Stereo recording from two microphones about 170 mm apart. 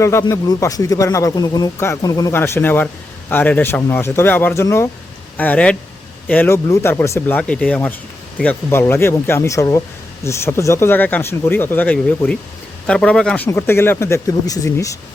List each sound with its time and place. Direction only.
0.0 s speech: 15° left (ahead or behind)